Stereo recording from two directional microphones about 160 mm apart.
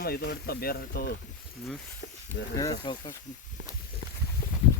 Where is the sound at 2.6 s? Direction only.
25° left (ahead or behind).